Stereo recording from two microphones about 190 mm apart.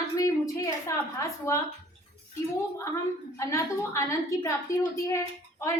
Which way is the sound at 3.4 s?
15° left (ahead or behind).